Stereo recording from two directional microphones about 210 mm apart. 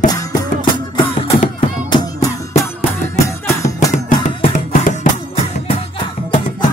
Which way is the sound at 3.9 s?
35° left (ahead or behind).